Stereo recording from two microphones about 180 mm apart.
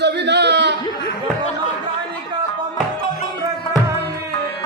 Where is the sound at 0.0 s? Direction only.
70° right (ahead or behind).